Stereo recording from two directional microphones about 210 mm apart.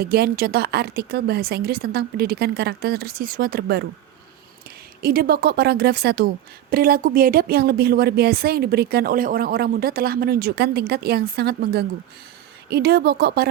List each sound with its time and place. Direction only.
0.0 s a woman's voice: 45° right (ahead or behind)
5.0 s a woman's voice: 45° right (ahead or behind)